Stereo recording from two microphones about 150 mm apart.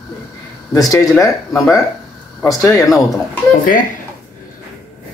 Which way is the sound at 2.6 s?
20° left (ahead or behind).